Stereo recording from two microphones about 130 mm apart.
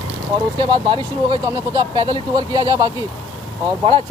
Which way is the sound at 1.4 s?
25° right (ahead or behind).